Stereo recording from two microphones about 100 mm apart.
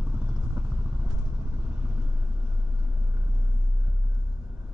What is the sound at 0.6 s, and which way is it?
Vehicle, 10° right (ahead or behind).